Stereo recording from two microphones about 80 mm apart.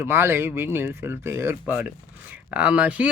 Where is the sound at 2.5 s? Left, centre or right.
Centre.